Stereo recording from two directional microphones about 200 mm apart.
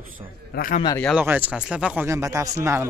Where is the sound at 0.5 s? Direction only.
45° left (ahead or behind).